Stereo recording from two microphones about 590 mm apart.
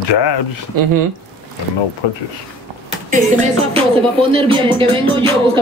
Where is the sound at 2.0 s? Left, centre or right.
Left.